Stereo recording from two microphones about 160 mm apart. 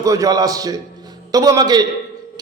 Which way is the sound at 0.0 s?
20° right (ahead or behind).